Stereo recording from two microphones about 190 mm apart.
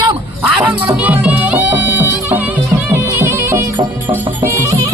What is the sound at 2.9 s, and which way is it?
Bagpipes, 10° right (ahead or behind).